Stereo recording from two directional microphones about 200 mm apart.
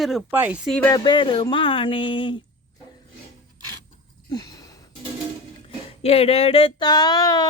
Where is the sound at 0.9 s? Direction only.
25° left (ahead or behind).